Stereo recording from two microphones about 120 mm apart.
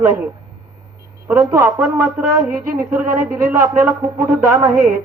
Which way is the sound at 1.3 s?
25° right (ahead or behind).